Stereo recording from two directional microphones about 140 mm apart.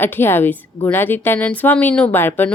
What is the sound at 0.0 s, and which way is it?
A woman's voice, 15° left (ahead or behind).